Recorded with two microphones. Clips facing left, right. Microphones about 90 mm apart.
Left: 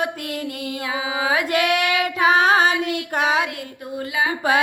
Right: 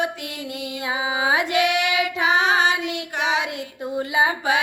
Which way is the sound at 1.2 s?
25° right (ahead or behind).